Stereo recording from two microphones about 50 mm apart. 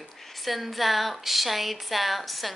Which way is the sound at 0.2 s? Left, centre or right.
Centre.